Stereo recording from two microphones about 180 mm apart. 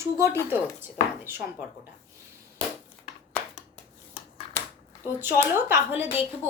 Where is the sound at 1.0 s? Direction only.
45° left (ahead or behind).